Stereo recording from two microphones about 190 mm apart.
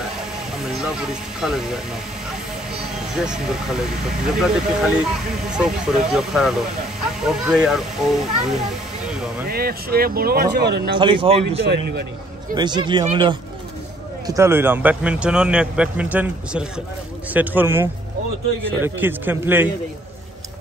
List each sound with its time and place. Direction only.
0.7 s speech: 5° right (ahead or behind)
3.2 s speech: 5° right (ahead or behind)
9.5 s speech: 50° right (ahead or behind)
11.0 s speech: 25° right (ahead or behind)
11.6 s speech: 60° right (ahead or behind)
12.5 s a man's voice: 25° right (ahead or behind)